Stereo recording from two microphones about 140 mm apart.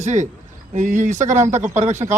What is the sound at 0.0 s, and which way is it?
A man's voice, 60° right (ahead or behind).